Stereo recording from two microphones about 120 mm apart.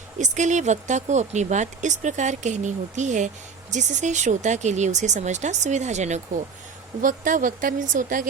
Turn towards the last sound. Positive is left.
turn(degrees=-90)